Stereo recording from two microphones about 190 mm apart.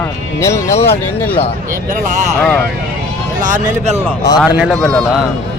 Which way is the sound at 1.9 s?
40° right (ahead or behind).